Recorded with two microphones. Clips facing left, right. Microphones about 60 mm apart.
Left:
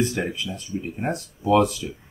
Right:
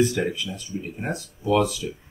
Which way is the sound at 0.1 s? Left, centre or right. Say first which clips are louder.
Right 1 dB; left.